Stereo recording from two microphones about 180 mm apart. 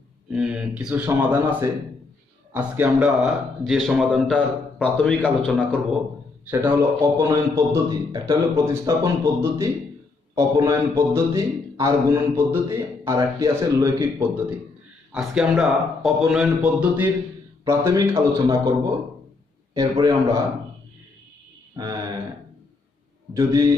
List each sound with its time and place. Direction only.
0.3 s speech: 5° right (ahead or behind)
6.7 s a man's voice: 20° right (ahead or behind)
19.7 s a man's voice: 20° right (ahead or behind)
21.8 s a man's voice: 20° right (ahead or behind)
23.3 s a man's voice: 15° right (ahead or behind)